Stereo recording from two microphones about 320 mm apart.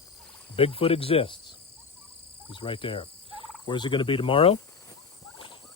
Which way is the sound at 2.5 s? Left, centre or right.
Centre.